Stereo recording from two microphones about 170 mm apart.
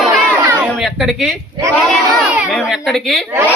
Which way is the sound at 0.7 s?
Centre (ahead or behind).